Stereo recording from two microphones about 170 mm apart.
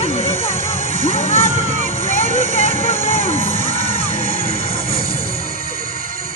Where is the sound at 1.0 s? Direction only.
35° left (ahead or behind).